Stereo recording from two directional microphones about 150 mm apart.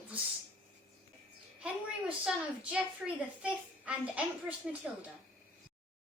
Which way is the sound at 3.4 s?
10° right (ahead or behind).